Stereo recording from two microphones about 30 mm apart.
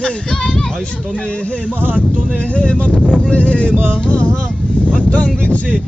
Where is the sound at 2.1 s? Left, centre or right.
Right.